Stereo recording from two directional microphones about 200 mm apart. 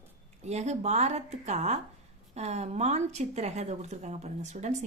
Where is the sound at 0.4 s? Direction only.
35° right (ahead or behind).